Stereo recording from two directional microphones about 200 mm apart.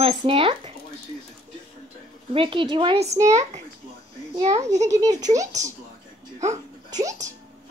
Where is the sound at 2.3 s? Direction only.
25° right (ahead or behind).